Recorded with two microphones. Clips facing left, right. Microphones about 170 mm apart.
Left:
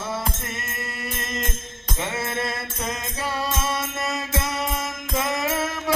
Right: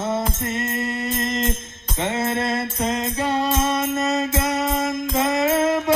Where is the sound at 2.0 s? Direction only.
25° right (ahead or behind).